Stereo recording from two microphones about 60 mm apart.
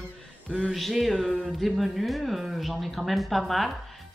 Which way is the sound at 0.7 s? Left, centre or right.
Centre.